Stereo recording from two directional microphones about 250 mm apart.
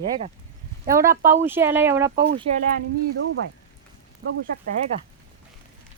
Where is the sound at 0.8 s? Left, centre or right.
Right.